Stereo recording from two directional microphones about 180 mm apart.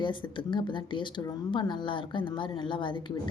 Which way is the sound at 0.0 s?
25° left (ahead or behind).